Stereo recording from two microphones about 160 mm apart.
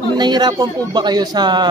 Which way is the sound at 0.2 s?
25° right (ahead or behind).